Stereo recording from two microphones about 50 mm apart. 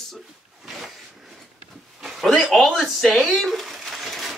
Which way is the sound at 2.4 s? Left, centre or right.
Centre.